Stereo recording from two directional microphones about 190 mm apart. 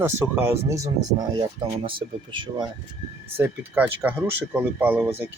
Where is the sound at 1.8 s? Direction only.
25° right (ahead or behind).